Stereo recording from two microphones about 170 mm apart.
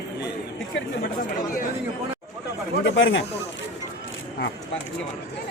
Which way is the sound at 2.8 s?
90° left.